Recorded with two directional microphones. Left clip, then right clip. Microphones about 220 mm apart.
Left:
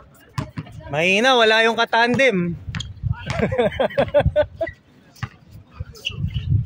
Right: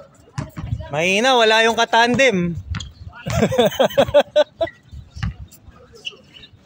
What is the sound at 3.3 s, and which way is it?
Speech, 30° right (ahead or behind).